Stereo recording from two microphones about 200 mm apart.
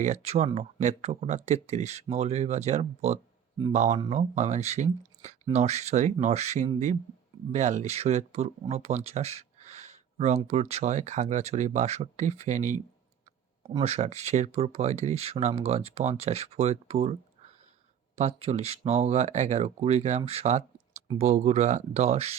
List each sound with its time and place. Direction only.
0.0 s speech: 35° right (ahead or behind)
18.2 s speech: 30° right (ahead or behind)